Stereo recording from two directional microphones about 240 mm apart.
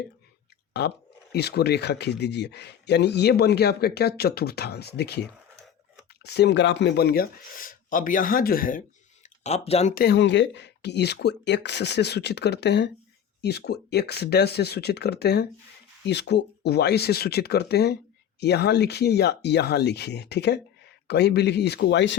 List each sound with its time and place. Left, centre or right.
0.7 s speech: left
10.0 s speech: left